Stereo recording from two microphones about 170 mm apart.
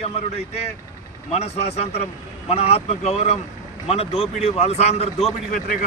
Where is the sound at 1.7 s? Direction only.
40° left (ahead or behind).